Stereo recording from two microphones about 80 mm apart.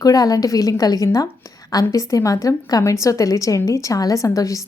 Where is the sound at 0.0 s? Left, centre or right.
Left.